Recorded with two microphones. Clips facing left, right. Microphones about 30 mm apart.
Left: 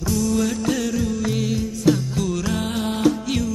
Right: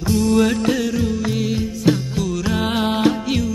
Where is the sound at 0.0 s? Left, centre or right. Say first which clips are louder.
Right 5 dB; right.